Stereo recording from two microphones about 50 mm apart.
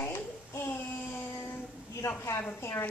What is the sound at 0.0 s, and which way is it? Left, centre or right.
Child singing, left.